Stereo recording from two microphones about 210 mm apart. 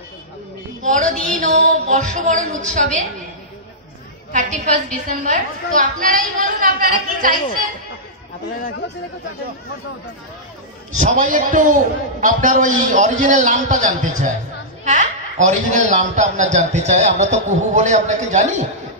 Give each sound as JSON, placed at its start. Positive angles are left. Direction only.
{"t": 0.8, "sound": "speech", "side_deg": -40}
{"t": 4.3, "sound": "a man's voice", "side_deg": -35}
{"t": 11.0, "sound": "a man's voice", "side_deg": -40}